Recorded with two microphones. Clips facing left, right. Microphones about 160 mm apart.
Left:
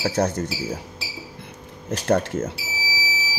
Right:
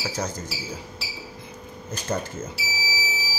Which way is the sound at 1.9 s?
75° left (ahead or behind).